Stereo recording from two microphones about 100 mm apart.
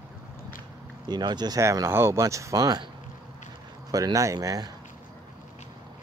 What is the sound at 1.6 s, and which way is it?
Speech, 30° right (ahead or behind).